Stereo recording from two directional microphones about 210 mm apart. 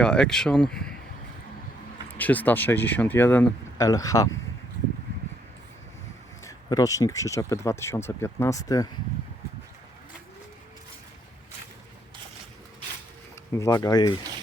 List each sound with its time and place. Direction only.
0.0 s speech: 5° left (ahead or behind)
2.1 s speech: 10° left (ahead or behind)
6.4 s speech: 15° left (ahead or behind)
13.6 s speech: 15° left (ahead or behind)